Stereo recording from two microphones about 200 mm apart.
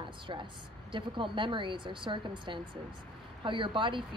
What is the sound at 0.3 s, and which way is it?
A woman's voice, 25° right (ahead or behind).